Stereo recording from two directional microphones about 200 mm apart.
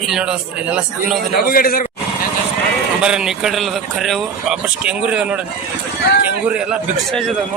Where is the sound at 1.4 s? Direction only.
45° left (ahead or behind).